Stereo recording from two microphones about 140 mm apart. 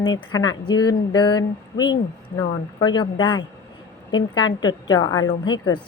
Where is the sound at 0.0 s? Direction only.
30° left (ahead or behind).